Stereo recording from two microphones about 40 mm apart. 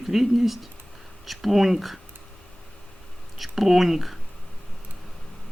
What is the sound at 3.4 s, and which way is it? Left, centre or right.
Speech, centre.